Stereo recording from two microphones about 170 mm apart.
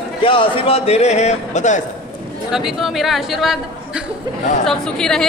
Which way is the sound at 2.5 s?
Centre (ahead or behind).